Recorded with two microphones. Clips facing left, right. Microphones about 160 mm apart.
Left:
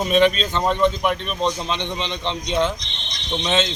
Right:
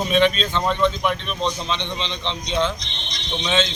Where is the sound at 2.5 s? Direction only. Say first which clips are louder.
Left 1 dB; 45° left (ahead or behind).